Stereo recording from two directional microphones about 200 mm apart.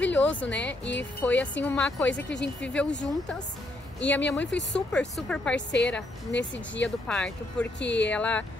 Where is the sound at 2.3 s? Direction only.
60° left (ahead or behind).